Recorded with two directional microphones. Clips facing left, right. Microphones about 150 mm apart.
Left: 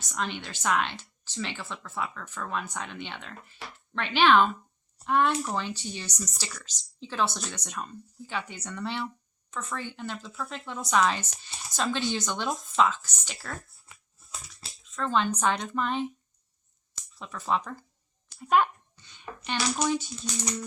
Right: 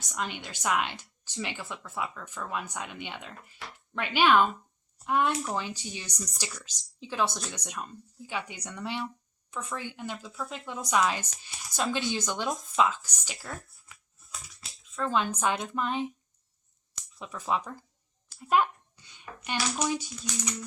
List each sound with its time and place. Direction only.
0.0 s speech: 10° right (ahead or behind)
14.6 s a sound: 35° left (ahead or behind)
14.9 s speech: 10° right (ahead or behind)
17.2 s speech: 15° right (ahead or behind)
18.3 s a sound: 5° right (ahead or behind)
19.5 s speech: 10° right (ahead or behind)
20.2 s music: 35° left (ahead or behind)